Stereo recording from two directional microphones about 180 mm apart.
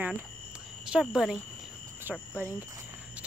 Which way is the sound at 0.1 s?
5° right (ahead or behind).